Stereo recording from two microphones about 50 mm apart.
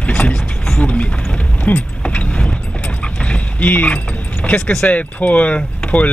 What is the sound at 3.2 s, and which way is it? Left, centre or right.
Mechanisms, left.